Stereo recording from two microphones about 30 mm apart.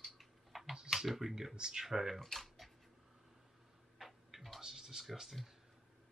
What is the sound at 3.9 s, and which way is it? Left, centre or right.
Tick-tock, centre.